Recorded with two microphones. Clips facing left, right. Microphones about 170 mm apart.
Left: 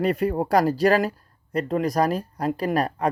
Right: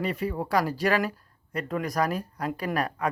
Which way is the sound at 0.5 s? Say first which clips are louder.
Left 6 dB; 35° left (ahead or behind).